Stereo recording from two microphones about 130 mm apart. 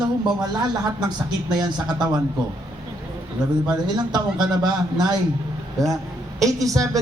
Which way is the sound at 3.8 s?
35° right (ahead or behind).